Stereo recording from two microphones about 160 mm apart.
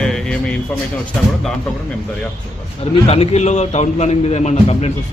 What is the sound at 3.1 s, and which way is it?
A man's voice, 40° left (ahead or behind).